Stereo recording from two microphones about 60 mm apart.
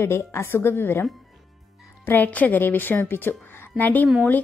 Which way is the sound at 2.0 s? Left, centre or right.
Left.